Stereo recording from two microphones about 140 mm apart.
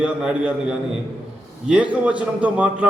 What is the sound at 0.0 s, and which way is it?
A man's voice, 5° right (ahead or behind).